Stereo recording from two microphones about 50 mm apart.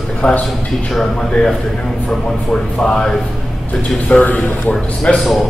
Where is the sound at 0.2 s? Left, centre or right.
Centre.